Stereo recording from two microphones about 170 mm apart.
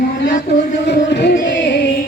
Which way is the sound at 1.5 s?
90° left.